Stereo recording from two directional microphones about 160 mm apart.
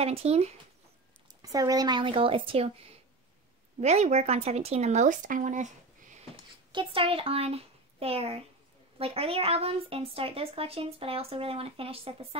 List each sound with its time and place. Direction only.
0.0 s speech: 40° right (ahead or behind)
1.4 s speech: 20° right (ahead or behind)
3.8 s speech: 40° right (ahead or behind)
6.7 s a child's voice: 30° right (ahead or behind)